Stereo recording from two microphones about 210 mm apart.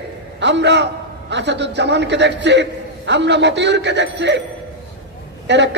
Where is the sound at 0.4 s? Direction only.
55° right (ahead or behind).